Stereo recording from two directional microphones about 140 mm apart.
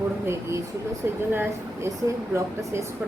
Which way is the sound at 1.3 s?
15° right (ahead or behind).